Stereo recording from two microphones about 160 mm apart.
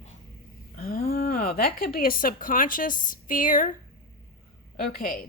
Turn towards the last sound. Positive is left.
turn(degrees=65)  # may be behind; listen again after turning